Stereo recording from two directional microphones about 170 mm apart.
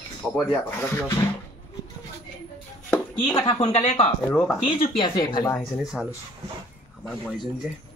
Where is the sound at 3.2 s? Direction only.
30° left (ahead or behind).